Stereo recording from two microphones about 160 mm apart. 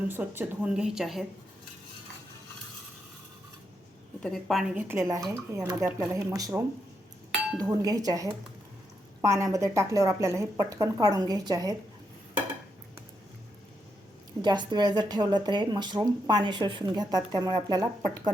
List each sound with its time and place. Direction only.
0.1 s a woman's voice: 10° right (ahead or behind)
4.2 s a woman's voice: centre (ahead or behind); by 6.5 s 20° right (ahead or behind)
7.6 s a woman's voice: 25° right (ahead or behind)
14.4 s a woman's voice: 30° right (ahead or behind)